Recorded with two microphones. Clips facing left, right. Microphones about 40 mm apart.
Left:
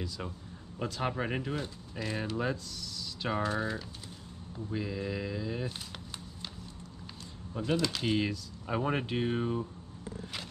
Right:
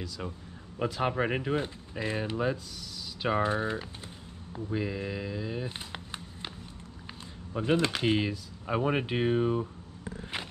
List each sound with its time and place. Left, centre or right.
0.2 s speech: centre
0.7 s speech: centre
2.3 s speech: centre
5.7 s a sound: right
7.5 s speech: right
8.2 s speech: centre